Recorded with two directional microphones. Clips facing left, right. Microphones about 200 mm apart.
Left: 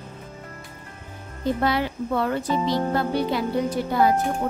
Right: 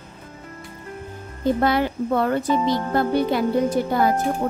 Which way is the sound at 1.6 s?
50° right (ahead or behind).